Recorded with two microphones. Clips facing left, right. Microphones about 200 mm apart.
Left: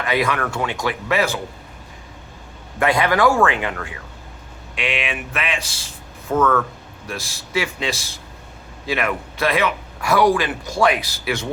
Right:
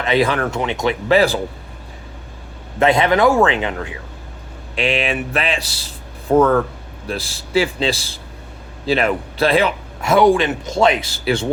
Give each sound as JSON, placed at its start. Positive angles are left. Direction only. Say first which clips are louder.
{"t": 0.0, "sound": "a man's voice", "louder": "right 4 dB", "side_deg": -25}
{"t": 2.7, "sound": "a man's voice", "louder": "right 4 dB", "side_deg": -25}
{"t": 4.8, "sound": "a man's voice", "louder": "right 6 dB", "side_deg": -35}